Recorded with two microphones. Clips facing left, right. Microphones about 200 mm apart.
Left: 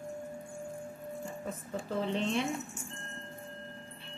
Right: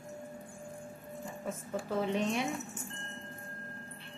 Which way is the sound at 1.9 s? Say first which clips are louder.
Even; 10° right (ahead or behind).